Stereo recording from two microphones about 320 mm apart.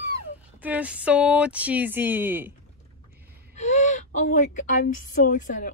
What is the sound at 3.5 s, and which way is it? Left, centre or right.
Speech, left.